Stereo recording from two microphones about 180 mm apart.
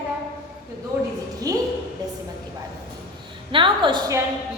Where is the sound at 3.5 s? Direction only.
25° right (ahead or behind).